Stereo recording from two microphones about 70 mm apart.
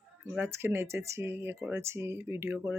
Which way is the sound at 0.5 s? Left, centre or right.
Right.